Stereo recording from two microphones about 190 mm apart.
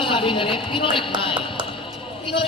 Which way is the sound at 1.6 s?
25° left (ahead or behind).